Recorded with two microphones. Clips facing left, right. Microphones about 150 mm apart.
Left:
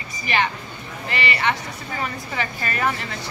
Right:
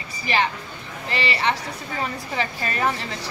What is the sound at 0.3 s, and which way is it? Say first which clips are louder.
Speech: even; 30° right (ahead or behind).